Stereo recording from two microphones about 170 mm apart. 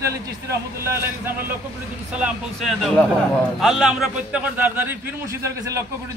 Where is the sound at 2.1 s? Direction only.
5° right (ahead or behind).